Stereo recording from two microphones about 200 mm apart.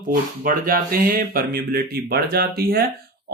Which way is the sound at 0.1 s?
45° right (ahead or behind).